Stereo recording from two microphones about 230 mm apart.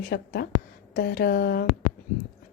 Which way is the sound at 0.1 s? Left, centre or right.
Left.